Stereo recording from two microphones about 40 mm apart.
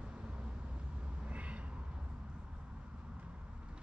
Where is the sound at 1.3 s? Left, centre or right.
Right.